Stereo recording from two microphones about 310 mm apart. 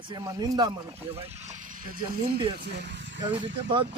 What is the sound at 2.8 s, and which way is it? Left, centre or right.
Vehicle, right.